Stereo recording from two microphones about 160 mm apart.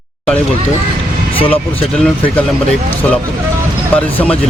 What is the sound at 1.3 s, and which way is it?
Speech, 35° left (ahead or behind).